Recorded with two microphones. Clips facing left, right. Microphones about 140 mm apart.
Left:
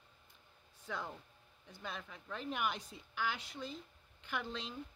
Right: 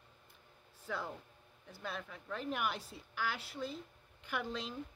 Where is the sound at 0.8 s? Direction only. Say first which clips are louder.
Right 2 dB; 5° right (ahead or behind).